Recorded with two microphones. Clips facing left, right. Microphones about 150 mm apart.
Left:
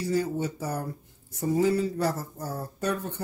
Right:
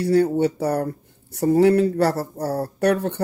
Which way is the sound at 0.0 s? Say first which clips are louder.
Right 9 dB; 60° right (ahead or behind).